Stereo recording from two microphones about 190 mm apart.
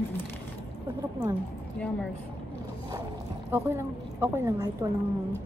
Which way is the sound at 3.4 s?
10° right (ahead or behind).